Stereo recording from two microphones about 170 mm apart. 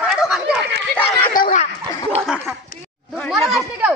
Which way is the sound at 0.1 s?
Centre (ahead or behind).